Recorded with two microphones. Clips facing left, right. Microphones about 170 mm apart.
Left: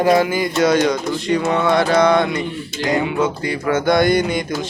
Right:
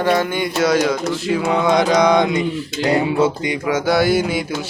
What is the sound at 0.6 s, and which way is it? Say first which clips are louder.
Speech: left 1 dB; centre (ahead or behind).